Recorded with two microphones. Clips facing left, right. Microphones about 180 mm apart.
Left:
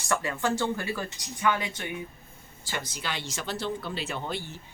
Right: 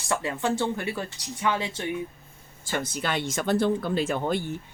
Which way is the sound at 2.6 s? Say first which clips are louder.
Right 6 dB; 50° right (ahead or behind).